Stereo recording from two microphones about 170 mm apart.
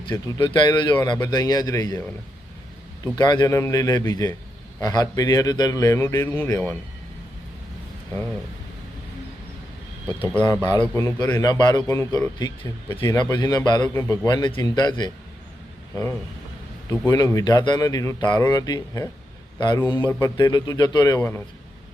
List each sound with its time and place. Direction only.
0.0 s a man's voice: 25° left (ahead or behind)
10.4 s a man's voice: 20° left (ahead or behind)
17.1 s a man's voice: 20° left (ahead or behind)
20.1 s a man's voice: 15° left (ahead or behind)
20.3 s a man's voice: 25° left (ahead or behind)
21.2 s a man's voice: 10° left (ahead or behind)